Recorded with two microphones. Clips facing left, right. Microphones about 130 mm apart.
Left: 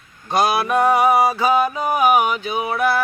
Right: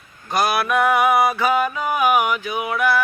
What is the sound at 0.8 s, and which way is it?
Mantra, 35° left (ahead or behind).